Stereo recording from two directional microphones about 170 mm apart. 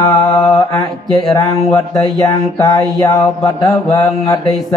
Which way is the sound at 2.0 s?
25° left (ahead or behind).